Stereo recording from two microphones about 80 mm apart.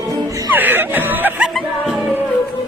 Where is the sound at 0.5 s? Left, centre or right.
Right.